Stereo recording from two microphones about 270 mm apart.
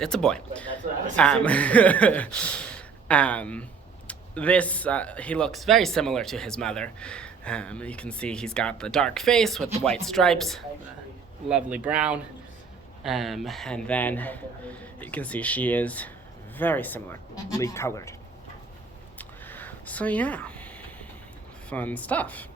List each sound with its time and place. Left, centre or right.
0.0 s speech: centre
19.2 s a sound: centre
21.7 s speech: centre